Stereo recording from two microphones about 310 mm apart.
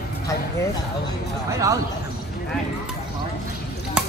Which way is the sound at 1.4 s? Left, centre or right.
Centre.